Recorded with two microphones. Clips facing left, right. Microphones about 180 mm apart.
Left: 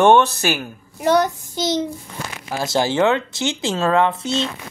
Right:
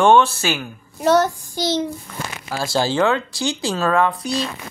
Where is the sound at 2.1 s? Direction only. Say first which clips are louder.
Right 1 dB; 20° left (ahead or behind).